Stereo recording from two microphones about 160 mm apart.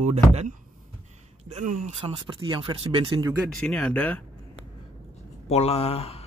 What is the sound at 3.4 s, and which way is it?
Speech, 5° left (ahead or behind).